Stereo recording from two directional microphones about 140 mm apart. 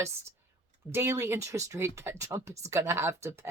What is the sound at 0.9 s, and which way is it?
Speech, 15° right (ahead or behind).